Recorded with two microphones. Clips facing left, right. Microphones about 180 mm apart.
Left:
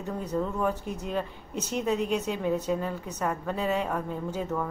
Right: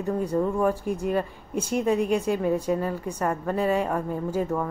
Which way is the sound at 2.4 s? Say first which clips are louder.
Right 3 dB; 10° right (ahead or behind).